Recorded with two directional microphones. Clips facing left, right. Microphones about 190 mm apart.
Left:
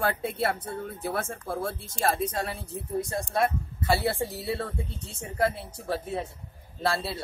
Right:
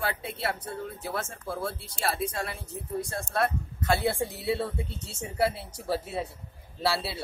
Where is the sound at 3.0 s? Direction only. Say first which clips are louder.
Left 1 dB; 15° left (ahead or behind); by 7.2 s 5° right (ahead or behind).